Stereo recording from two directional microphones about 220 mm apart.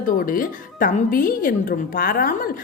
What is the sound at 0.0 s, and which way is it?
Speech, 40° left (ahead or behind).